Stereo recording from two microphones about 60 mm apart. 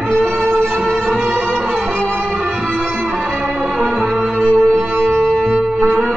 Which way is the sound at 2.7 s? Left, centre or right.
Centre.